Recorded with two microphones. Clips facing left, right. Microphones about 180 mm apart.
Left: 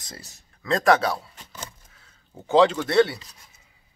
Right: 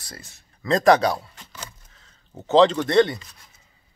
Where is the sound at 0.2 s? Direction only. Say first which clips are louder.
Even; 40° left (ahead or behind).